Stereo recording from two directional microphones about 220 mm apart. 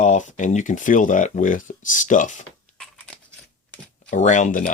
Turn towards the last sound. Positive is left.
turn(degrees=35)  # may be behind; listen again after turning